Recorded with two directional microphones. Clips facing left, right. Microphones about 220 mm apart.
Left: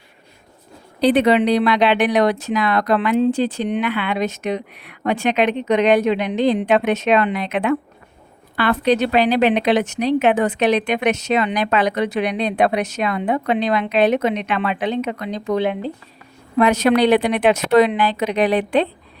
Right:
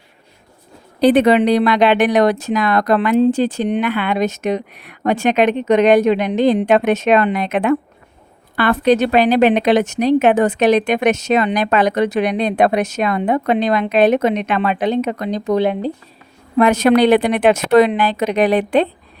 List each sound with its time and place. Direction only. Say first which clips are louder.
1.0 s speech: right 3 dB; 50° right (ahead or behind)
16.6 s speech: right 3 dB; 50° right (ahead or behind)